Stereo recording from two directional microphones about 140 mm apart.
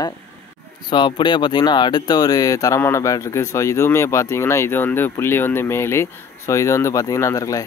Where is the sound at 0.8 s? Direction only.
35° left (ahead or behind).